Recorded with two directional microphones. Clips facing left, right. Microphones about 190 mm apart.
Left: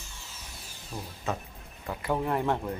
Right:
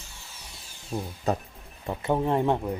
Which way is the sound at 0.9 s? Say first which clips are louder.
Right 6 dB; 30° right (ahead or behind).